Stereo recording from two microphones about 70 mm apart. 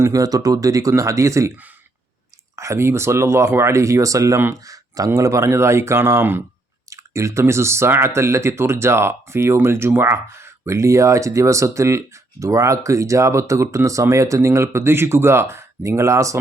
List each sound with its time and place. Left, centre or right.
0.0 s speech: right
2.6 s speech: right